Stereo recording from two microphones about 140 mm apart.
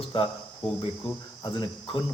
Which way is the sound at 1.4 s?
35° left (ahead or behind).